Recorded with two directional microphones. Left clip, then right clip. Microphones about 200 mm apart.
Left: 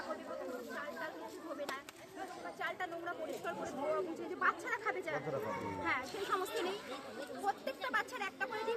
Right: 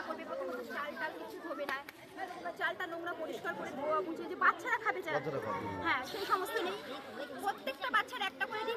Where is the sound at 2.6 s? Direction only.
15° right (ahead or behind); by 6.7 s centre (ahead or behind).